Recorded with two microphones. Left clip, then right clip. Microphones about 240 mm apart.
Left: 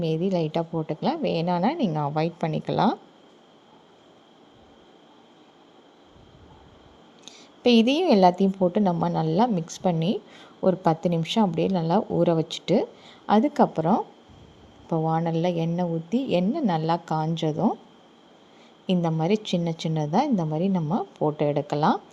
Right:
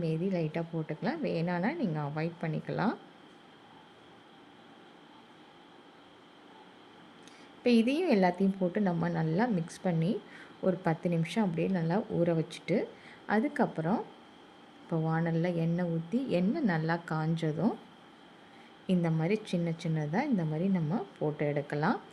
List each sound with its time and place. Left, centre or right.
0.0 s a woman's voice: left
7.3 s a woman's voice: left
18.9 s a woman's voice: centre